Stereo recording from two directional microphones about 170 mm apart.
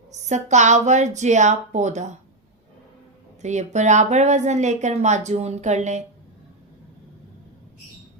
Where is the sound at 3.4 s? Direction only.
45° right (ahead or behind).